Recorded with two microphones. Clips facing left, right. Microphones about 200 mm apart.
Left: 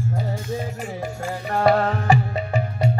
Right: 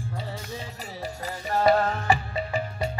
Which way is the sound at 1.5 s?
45° left (ahead or behind).